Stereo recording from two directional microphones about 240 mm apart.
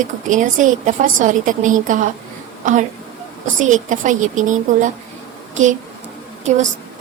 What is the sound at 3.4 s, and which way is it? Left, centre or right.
A woman's voice, right.